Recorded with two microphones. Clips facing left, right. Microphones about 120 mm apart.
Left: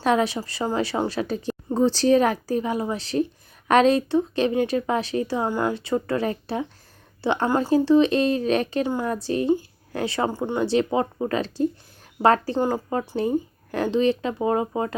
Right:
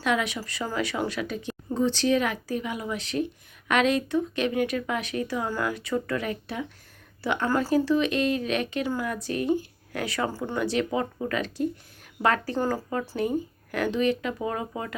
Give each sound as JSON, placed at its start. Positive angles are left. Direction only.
{"t": 0.0, "sound": "a woman's voice", "side_deg": 35}
{"t": 12.5, "sound": "speech", "side_deg": 20}
{"t": 13.0, "sound": "a woman's voice", "side_deg": 30}